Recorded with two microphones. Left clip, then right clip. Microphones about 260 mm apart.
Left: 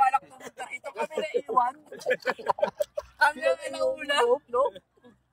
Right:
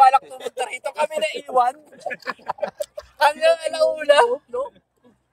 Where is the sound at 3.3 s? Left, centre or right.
Right.